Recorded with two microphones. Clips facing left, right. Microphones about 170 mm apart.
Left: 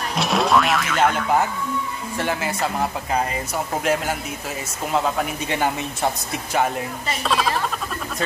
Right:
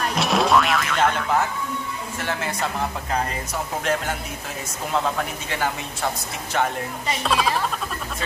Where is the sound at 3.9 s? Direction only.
10° left (ahead or behind).